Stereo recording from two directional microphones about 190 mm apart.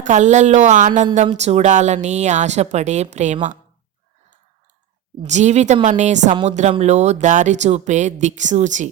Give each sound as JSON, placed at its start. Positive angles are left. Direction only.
{"t": 0.0, "sound": "speech", "side_deg": -40}
{"t": 5.2, "sound": "speech", "side_deg": -35}